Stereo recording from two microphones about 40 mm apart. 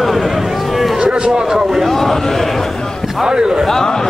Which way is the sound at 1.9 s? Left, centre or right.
Centre.